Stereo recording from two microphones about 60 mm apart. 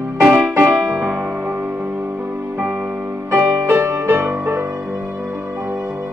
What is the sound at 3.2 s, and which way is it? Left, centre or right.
Music, right.